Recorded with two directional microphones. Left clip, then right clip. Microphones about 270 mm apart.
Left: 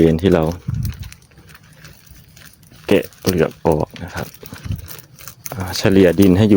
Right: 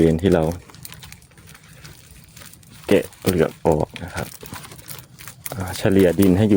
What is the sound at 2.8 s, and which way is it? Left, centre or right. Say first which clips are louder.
Speech: left 2 dB; centre.